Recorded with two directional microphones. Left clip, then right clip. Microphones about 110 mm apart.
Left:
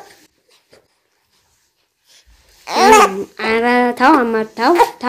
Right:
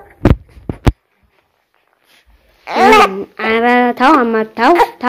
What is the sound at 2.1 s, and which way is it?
Babbling, 5° left (ahead or behind).